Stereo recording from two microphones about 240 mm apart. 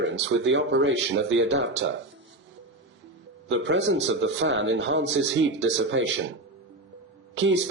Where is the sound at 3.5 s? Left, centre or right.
Right.